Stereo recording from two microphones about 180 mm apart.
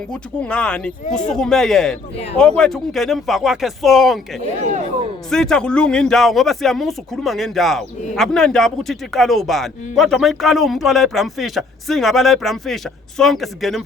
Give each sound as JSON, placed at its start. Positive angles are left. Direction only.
{"t": 0.1, "sound": "speech", "side_deg": 5}
{"t": 4.6, "sound": "speech", "side_deg": -40}
{"t": 5.3, "sound": "speech", "side_deg": 5}